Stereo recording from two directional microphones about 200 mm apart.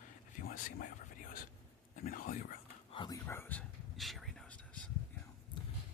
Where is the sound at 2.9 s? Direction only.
25° left (ahead or behind).